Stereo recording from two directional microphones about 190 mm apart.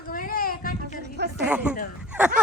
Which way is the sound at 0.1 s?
50° left (ahead or behind).